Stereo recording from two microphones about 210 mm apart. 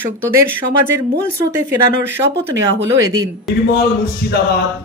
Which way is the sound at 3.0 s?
15° right (ahead or behind).